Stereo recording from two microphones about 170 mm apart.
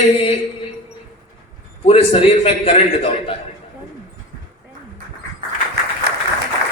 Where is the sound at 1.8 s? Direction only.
35° left (ahead or behind).